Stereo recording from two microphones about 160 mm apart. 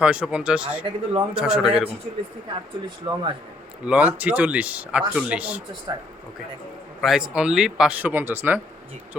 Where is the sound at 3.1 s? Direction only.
25° right (ahead or behind).